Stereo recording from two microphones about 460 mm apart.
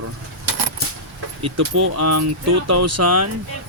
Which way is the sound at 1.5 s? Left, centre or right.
Right.